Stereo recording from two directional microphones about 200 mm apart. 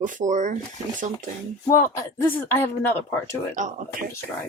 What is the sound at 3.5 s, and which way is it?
Speech, 40° right (ahead or behind).